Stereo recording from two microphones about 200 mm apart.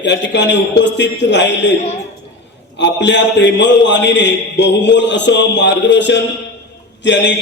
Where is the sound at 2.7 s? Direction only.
60° left (ahead or behind).